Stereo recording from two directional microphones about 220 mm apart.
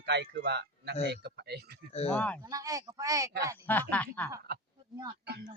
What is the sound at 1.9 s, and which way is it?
Speech, 30° left (ahead or behind).